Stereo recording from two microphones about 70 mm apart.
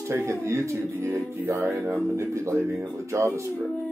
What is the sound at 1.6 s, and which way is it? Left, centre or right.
Speech, right.